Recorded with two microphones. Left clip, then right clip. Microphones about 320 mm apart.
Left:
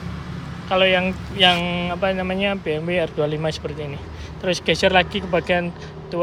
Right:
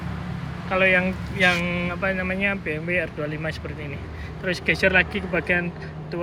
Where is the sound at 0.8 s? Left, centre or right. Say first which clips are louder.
Left 2 dB; left.